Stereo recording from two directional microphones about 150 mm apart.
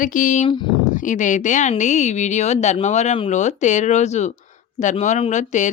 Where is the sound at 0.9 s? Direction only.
60° left (ahead or behind).